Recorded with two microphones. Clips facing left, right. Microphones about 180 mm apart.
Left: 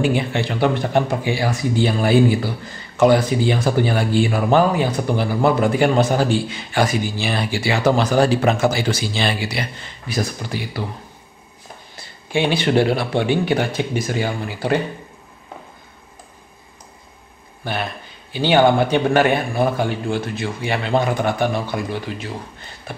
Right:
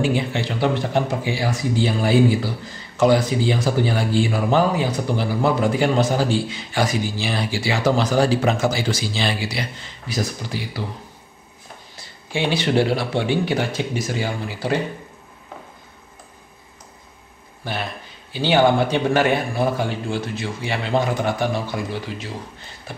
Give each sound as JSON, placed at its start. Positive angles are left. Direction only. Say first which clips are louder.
{"t": 0.0, "sound": "speech", "louder": "left 2 dB", "side_deg": 55}
{"t": 12.3, "sound": "speech", "louder": "left 3 dB", "side_deg": 55}
{"t": 17.6, "sound": "speech", "louder": "left 3 dB", "side_deg": 55}